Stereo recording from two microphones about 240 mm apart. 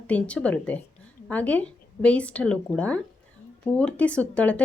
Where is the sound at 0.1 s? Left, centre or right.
Centre.